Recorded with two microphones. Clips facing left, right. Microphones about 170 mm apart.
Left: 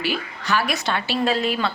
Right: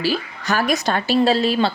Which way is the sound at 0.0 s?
40° right (ahead or behind).